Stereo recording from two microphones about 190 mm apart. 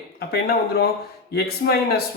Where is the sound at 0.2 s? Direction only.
55° left (ahead or behind).